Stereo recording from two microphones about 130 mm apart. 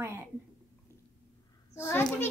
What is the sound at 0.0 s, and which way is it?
Speech, 15° right (ahead or behind).